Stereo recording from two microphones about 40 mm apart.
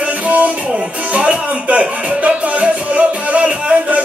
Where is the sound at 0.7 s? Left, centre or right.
Right.